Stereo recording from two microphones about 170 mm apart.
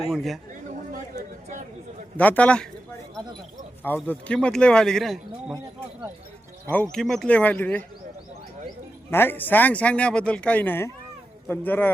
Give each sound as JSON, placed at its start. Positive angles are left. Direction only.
{"t": 0.1, "sound": "speech", "side_deg": 0}
{"t": 0.9, "sound": "a sound", "side_deg": -45}
{"t": 2.1, "sound": "speech", "side_deg": 10}
{"t": 3.8, "sound": "speech", "side_deg": 10}
{"t": 6.9, "sound": "speech", "side_deg": 5}
{"t": 9.0, "sound": "speech", "side_deg": 10}